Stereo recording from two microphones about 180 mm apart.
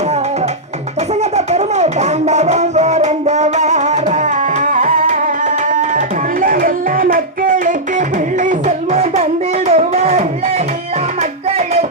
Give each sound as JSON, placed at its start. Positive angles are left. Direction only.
{"t": 1.2, "sound": "music", "side_deg": -40}
{"t": 6.4, "sound": "music", "side_deg": -50}
{"t": 11.5, "sound": "a sound", "side_deg": -35}